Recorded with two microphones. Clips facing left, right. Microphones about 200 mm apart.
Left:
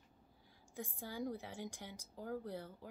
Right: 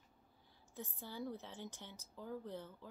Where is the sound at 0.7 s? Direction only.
10° left (ahead or behind).